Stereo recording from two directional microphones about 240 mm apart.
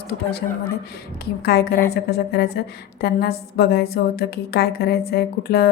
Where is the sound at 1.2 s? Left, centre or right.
Left.